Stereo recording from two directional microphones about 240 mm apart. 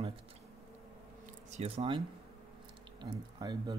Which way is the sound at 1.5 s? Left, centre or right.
Right.